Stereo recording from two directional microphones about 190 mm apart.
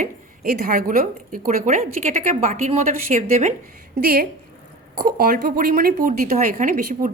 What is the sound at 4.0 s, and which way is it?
Speech, 50° right (ahead or behind).